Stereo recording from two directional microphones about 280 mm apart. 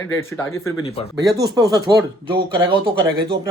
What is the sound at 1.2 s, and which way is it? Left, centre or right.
Speech, centre.